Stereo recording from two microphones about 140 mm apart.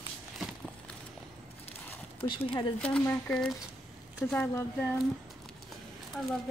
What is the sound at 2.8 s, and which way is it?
Speech, 10° left (ahead or behind).